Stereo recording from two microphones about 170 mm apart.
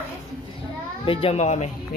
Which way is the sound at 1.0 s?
35° left (ahead or behind).